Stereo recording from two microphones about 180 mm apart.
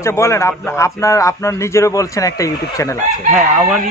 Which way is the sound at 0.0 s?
15° left (ahead or behind).